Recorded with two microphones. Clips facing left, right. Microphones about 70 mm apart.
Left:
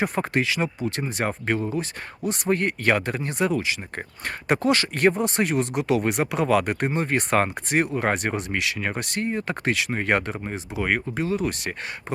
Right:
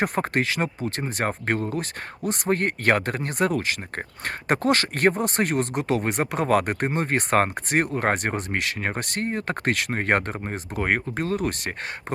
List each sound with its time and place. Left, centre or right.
0.0 s speech: right